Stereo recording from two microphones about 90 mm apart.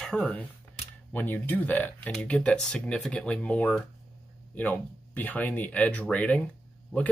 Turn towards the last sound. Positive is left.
turn(degrees=5)  # may be behind; listen again after turning